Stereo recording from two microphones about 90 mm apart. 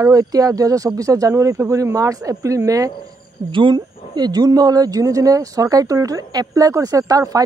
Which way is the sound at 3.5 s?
65° right (ahead or behind).